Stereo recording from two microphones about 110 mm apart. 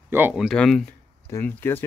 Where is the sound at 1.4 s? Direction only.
20° left (ahead or behind).